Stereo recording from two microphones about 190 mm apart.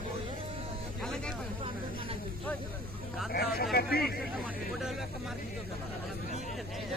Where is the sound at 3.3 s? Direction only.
55° left (ahead or behind).